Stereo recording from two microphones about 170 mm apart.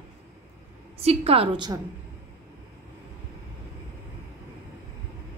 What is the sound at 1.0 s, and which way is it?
Speech, 35° right (ahead or behind).